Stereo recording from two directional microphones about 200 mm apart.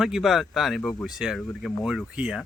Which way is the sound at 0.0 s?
Centre (ahead or behind).